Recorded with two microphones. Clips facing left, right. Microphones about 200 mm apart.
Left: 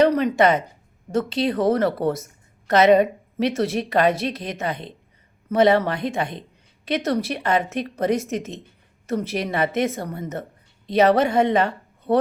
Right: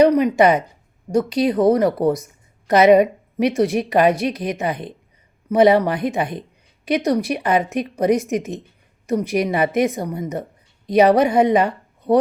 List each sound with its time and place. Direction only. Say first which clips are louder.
0.0 s a woman's voice: right 3 dB; 10° right (ahead or behind)